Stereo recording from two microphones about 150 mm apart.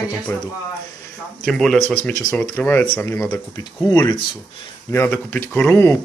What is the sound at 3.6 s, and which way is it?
Speech, 25° left (ahead or behind).